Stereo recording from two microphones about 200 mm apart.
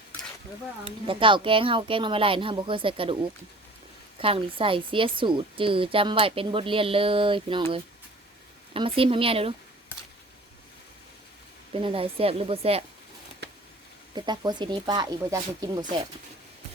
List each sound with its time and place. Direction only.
0.9 s a woman's voice: 25° right (ahead or behind)
4.2 s a woman's voice: 25° right (ahead or behind)
11.7 s a woman's voice: 25° right (ahead or behind)
13.4 s a sound: 55° right (ahead or behind)
14.2 s a woman's voice: 20° right (ahead or behind)